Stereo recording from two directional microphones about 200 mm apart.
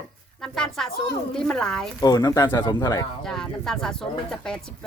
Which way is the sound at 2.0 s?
20° left (ahead or behind).